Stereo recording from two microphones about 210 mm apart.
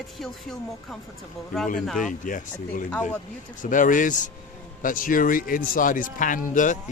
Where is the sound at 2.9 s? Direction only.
5° left (ahead or behind).